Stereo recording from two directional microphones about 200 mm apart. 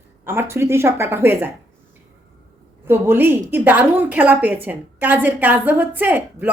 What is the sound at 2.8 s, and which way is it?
A woman's voice, 10° right (ahead or behind).